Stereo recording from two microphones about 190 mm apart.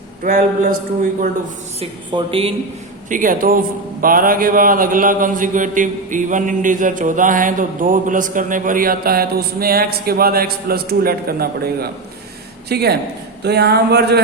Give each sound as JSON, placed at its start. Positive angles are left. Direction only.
{"t": 0.2, "sound": "speech", "side_deg": -45}
{"t": 1.8, "sound": "speech", "side_deg": -30}
{"t": 3.1, "sound": "speech", "side_deg": -45}